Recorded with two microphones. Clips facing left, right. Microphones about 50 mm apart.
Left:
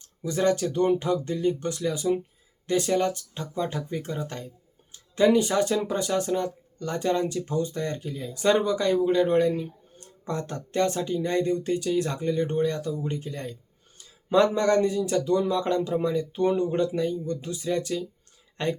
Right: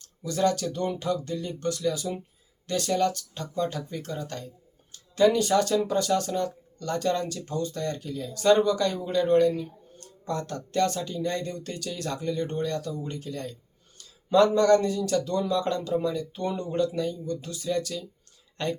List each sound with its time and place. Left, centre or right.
0.0 s speech: left